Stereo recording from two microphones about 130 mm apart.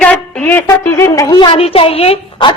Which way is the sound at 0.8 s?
25° left (ahead or behind).